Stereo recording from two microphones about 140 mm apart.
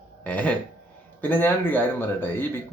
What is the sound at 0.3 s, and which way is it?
A man's voice, 10° left (ahead or behind).